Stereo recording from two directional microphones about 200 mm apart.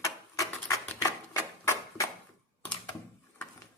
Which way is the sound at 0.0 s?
15° left (ahead or behind).